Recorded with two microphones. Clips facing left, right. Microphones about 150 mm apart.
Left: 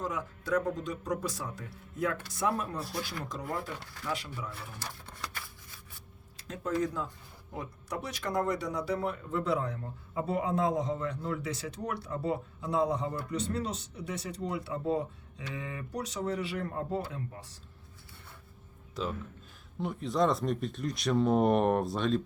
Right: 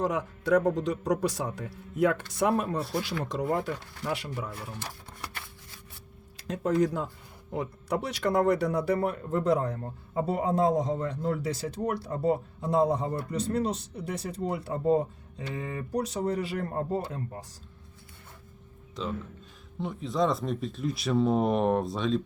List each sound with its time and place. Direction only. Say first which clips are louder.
0.0 s speech: right 7 dB; 70° right (ahead or behind)
6.3 s speech: right 6 dB; 70° right (ahead or behind); by 17.4 s 45° right (ahead or behind)
19.8 s speech: right 1 dB; centre (ahead or behind)